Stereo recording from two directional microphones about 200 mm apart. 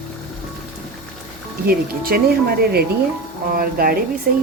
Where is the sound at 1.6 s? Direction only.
50° right (ahead or behind).